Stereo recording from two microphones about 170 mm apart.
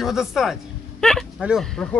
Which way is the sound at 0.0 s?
Centre (ahead or behind).